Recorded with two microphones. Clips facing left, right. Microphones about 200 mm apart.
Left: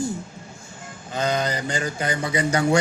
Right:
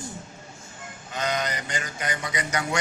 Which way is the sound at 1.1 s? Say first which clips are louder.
Left 4 dB; 30° left (ahead or behind).